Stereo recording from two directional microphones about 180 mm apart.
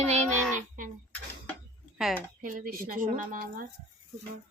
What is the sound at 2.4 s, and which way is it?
Speech, 50° right (ahead or behind).